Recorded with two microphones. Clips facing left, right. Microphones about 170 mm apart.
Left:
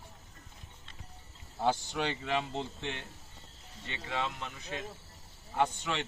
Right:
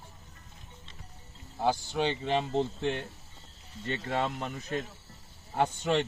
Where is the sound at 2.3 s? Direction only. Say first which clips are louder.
Right 6 dB; 40° right (ahead or behind).